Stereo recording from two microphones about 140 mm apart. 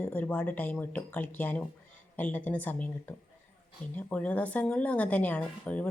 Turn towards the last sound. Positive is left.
turn(degrees=10)  # may be behind; listen again after turning